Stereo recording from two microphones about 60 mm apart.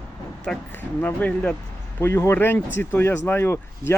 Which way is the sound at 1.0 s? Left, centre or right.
Left.